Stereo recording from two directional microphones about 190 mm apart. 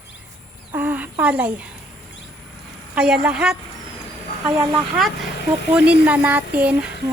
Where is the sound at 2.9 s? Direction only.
5° right (ahead or behind).